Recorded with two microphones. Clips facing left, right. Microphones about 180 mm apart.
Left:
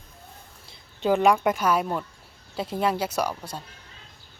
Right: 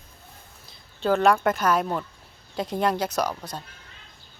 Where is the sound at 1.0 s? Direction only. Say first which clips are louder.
Even; 15° left (ahead or behind).